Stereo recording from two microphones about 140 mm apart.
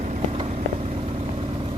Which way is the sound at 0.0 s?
65° right (ahead or behind).